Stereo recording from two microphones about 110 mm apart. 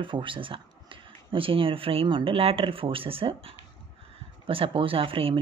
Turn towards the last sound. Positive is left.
turn(degrees=-55)  # may be behind; listen again after turning